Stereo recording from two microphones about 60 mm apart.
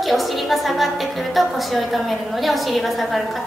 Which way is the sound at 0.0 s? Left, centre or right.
Centre.